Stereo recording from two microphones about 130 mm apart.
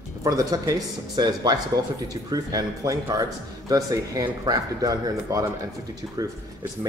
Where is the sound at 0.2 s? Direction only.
25° right (ahead or behind).